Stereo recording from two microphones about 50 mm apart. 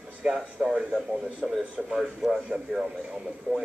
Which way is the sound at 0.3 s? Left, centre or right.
Centre.